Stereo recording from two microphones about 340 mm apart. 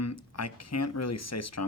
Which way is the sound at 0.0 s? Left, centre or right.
Left.